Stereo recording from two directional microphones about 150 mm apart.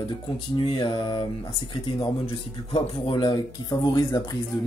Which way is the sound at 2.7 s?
35° left (ahead or behind).